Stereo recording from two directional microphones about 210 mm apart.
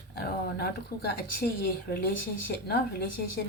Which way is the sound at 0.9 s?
15° left (ahead or behind).